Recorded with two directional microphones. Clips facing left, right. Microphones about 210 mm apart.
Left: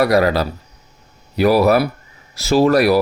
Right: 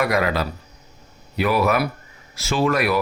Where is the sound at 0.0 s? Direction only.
35° left (ahead or behind).